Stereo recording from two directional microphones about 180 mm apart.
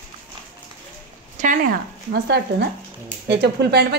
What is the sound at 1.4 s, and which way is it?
Speech, 45° right (ahead or behind).